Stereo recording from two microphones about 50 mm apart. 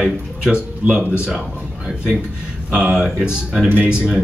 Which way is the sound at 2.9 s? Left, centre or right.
Centre.